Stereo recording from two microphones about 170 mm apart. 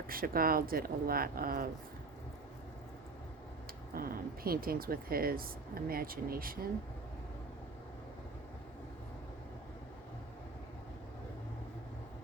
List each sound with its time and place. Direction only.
0.1 s speech: 60° right (ahead or behind)
3.9 s speech: 60° right (ahead or behind)